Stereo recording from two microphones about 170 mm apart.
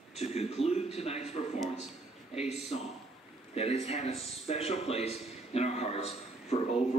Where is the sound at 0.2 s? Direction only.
40° left (ahead or behind).